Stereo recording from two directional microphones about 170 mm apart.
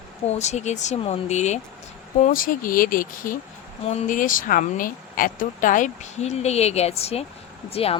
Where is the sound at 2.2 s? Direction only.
55° left (ahead or behind).